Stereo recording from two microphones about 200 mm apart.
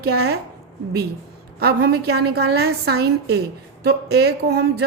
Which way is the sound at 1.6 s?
55° right (ahead or behind).